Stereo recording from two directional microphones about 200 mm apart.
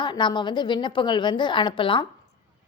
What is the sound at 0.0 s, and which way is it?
A woman's voice, 25° left (ahead or behind).